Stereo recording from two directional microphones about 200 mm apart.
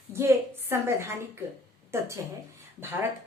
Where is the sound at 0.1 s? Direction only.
10° right (ahead or behind).